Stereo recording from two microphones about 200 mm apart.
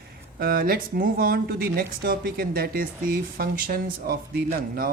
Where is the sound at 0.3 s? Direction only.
50° right (ahead or behind).